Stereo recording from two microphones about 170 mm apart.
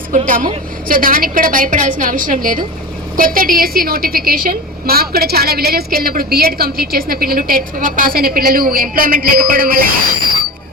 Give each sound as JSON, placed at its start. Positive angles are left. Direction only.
{"t": 0.3, "sound": "a woman's voice", "side_deg": -55}